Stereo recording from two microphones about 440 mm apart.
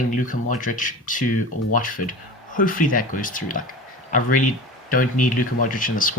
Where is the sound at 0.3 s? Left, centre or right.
Centre.